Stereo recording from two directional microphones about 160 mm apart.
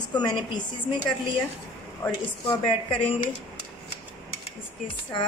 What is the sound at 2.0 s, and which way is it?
Speech, 10° left (ahead or behind).